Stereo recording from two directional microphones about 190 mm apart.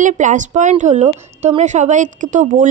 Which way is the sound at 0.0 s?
40° right (ahead or behind).